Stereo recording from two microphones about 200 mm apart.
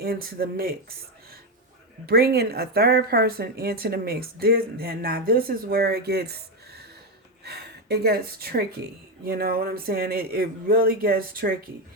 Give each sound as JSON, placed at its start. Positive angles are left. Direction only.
{"t": 0.0, "sound": "a woman's voice", "side_deg": -50}
{"t": 2.0, "sound": "a woman's voice", "side_deg": -50}
{"t": 7.4, "sound": "a woman's voice", "side_deg": -55}